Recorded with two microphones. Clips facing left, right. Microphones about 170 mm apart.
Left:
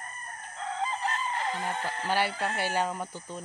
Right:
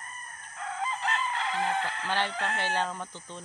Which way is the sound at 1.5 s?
40° left (ahead or behind).